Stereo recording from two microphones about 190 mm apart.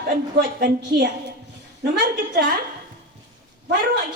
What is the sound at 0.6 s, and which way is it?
Speech, 65° right (ahead or behind).